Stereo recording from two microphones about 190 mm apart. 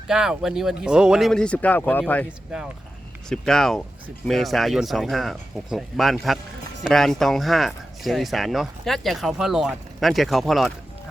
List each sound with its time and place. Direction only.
0.1 s speech: 5° right (ahead or behind)
2.5 s speech: 5° right (ahead or behind)